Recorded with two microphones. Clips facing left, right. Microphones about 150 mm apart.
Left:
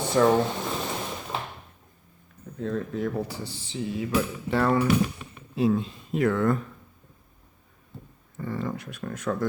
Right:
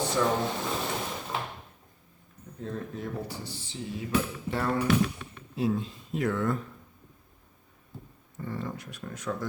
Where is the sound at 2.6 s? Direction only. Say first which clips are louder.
Left 7 dB; 90° left.